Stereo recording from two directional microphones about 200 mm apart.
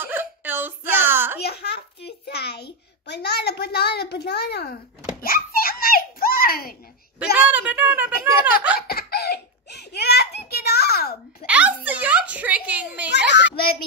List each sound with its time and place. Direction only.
0.0 s a sound: 10° right (ahead or behind)
1.4 s a child's voice: 55° left (ahead or behind)
5.2 s a sound: 50° left (ahead or behind)
7.3 s speech: 5° right (ahead or behind)
8.7 s giggle: 50° left (ahead or behind)
11.4 s a child's voice: 5° right (ahead or behind)
13.3 s a child's voice: 55° left (ahead or behind)